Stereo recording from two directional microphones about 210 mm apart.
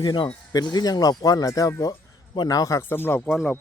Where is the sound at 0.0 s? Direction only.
20° left (ahead or behind).